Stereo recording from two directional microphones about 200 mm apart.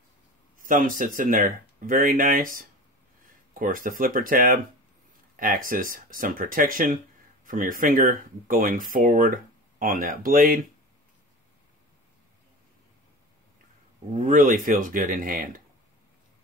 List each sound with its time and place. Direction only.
0.6 s speech: 40° right (ahead or behind)
14.1 s speech: 40° right (ahead or behind)